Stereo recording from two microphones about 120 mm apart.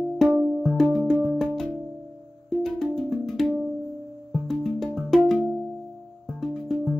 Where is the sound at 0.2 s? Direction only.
Centre (ahead or behind).